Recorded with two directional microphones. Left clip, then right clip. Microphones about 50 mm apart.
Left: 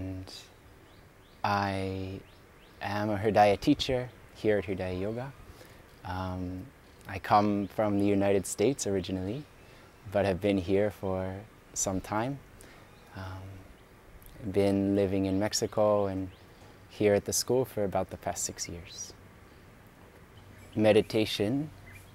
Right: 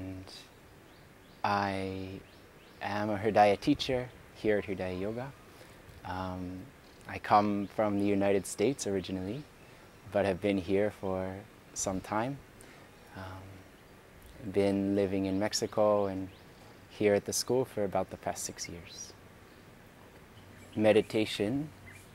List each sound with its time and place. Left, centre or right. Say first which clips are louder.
0.0 s a sound: left 3 dB; left
1.4 s speech: left 1 dB; left
11.9 s speech: even; left
14.5 s speech: left 2 dB; left
20.7 s speech: left 2 dB; left